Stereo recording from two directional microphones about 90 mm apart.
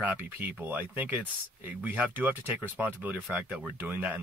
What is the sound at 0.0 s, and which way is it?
Speech, 20° right (ahead or behind).